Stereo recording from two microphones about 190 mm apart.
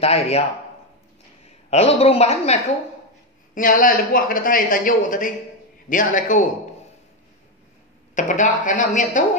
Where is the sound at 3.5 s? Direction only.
45° left (ahead or behind).